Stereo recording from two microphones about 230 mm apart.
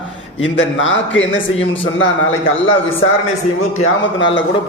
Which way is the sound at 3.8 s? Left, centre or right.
Left.